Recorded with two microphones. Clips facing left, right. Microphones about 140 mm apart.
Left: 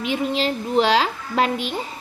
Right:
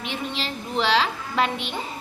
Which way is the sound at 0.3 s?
40° left (ahead or behind).